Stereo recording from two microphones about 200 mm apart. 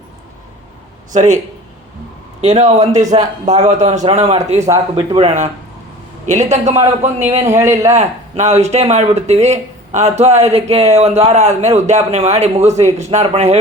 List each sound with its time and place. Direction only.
1.1 s speech: 35° right (ahead or behind)
2.4 s speech: 35° right (ahead or behind)
7.4 s speech: 15° right (ahead or behind)
7.9 s speech: 35° right (ahead or behind)